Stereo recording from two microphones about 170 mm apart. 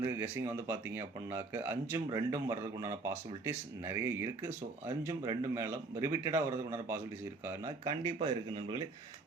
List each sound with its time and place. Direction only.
0.0 s speech: 15° right (ahead or behind)